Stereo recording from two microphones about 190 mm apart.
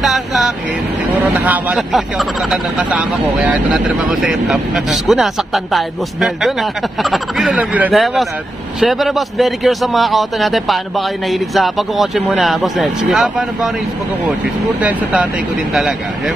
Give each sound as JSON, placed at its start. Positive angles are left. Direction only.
{"t": 0.0, "sound": "vehicle", "side_deg": 0}
{"t": 1.3, "sound": "speech", "side_deg": -10}
{"t": 14.8, "sound": "speech", "side_deg": -10}